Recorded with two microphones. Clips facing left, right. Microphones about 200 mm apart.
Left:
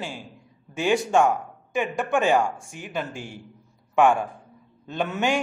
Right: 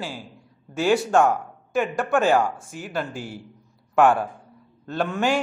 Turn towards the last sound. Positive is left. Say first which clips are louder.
# right 2 dB
turn(degrees=0)  # may be behind; listen again after turning